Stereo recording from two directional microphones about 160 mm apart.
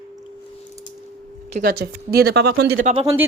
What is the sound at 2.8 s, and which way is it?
Speech, 50° right (ahead or behind).